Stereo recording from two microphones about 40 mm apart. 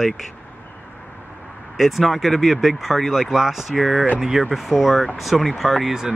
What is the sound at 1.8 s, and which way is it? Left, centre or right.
Speech, centre.